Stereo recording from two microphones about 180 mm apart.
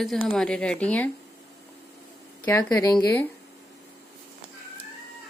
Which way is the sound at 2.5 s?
15° left (ahead or behind).